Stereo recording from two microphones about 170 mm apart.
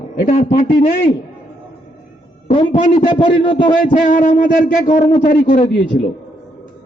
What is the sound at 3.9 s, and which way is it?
Speech, 50° left (ahead or behind).